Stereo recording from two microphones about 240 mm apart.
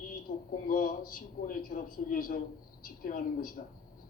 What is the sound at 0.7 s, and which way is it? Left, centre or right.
A man's voice, left.